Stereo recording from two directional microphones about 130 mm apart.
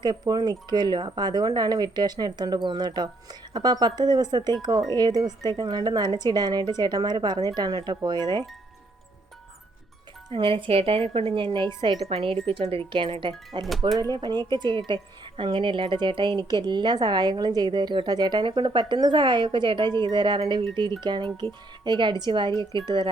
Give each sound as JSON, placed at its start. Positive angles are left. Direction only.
{"t": 0.0, "sound": "a woman's voice", "side_deg": -35}
{"t": 10.3, "sound": "speech", "side_deg": -40}
{"t": 12.0, "sound": "a woman's voice", "side_deg": -50}